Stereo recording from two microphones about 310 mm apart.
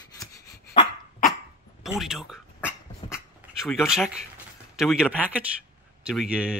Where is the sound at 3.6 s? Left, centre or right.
Centre.